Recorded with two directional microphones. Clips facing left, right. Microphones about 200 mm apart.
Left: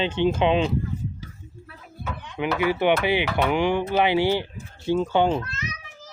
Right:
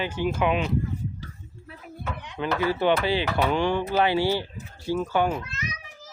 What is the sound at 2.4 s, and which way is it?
Speech, 15° left (ahead or behind).